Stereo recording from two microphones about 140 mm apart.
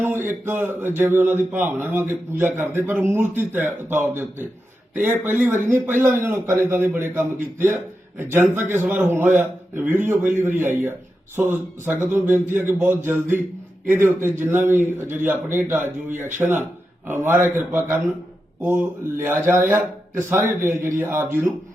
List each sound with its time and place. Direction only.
0.0 s a man's voice: 15° right (ahead or behind)